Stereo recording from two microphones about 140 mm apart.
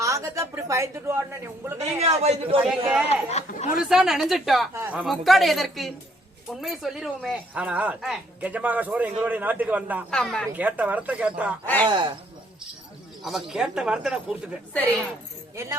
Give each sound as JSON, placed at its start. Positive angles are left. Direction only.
{"t": 0.0, "sound": "a man's voice", "side_deg": -20}
{"t": 2.0, "sound": "a man's voice", "side_deg": -50}
{"t": 3.2, "sound": "speech", "side_deg": 55}
{"t": 3.8, "sound": "speech", "side_deg": 0}
{"t": 4.7, "sound": "speech", "side_deg": -15}
{"t": 10.1, "sound": "speech", "side_deg": 5}
{"t": 10.5, "sound": "speech", "side_deg": -10}
{"t": 11.6, "sound": "speech", "side_deg": 10}
{"t": 13.2, "sound": "speech", "side_deg": -5}
{"t": 14.7, "sound": "speech", "side_deg": 10}